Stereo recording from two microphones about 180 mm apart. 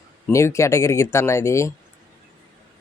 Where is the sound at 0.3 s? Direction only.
15° left (ahead or behind).